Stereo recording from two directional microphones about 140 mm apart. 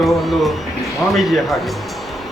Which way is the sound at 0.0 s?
Centre (ahead or behind).